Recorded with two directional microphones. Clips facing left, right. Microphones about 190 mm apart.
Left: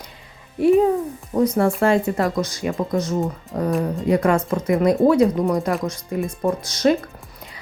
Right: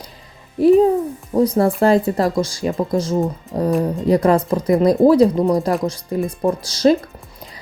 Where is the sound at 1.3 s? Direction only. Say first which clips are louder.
Right 3 dB; 35° right (ahead or behind).